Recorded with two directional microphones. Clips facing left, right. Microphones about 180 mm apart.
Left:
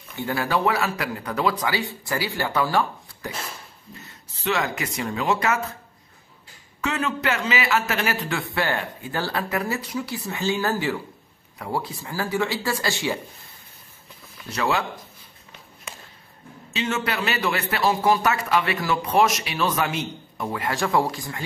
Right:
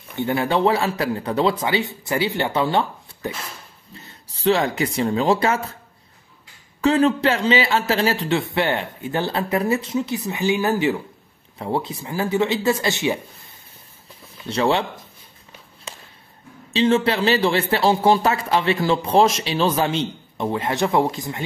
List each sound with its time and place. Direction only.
0.1 s a man's voice: 20° right (ahead or behind)
6.8 s a man's voice: 30° right (ahead or behind)
14.4 s a man's voice: 30° right (ahead or behind)
16.7 s a man's voice: 30° right (ahead or behind)